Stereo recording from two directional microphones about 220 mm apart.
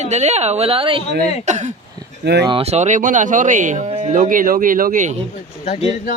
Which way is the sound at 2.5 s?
25° right (ahead or behind).